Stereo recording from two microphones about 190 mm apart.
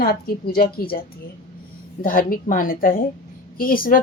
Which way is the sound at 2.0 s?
50° left (ahead or behind).